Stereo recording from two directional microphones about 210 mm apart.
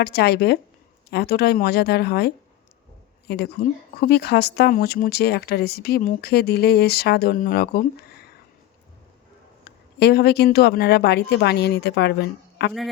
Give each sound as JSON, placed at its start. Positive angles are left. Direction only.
{"t": 0.0, "sound": "speech", "side_deg": 50}
{"t": 10.0, "sound": "speech", "side_deg": 50}